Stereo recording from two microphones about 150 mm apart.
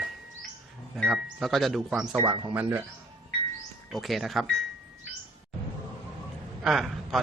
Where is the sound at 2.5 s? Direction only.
10° right (ahead or behind).